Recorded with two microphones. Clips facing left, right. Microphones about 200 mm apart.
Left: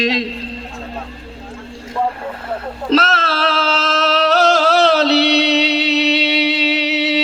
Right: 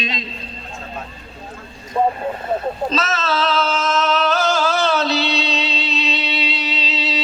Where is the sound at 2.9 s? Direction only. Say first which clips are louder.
Left 5 dB; 65° left (ahead or behind).